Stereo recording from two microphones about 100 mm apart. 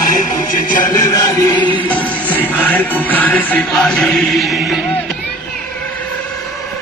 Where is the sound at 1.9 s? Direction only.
15° left (ahead or behind); by 4.7 s centre (ahead or behind).